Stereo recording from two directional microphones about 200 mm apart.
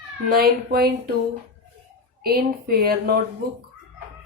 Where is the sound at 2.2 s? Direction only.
50° right (ahead or behind).